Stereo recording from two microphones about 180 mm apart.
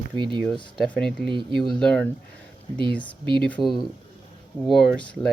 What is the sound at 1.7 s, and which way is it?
Speech, 5° left (ahead or behind).